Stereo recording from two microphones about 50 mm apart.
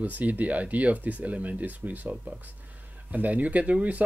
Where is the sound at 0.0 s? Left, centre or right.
Right.